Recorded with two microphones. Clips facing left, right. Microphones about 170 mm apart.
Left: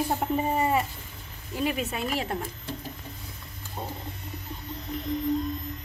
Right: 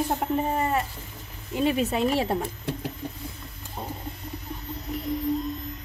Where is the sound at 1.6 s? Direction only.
25° right (ahead or behind).